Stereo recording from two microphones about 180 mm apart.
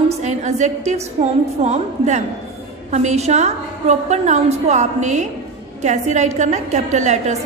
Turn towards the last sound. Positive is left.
turn(degrees=-40)  # may be behind; listen again after turning